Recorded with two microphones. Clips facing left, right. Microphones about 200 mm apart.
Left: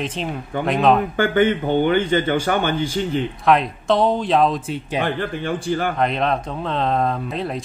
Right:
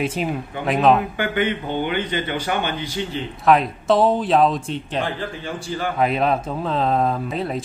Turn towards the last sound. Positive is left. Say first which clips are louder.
# right 1 dB
turn(degrees=0)  # may be behind; listen again after turning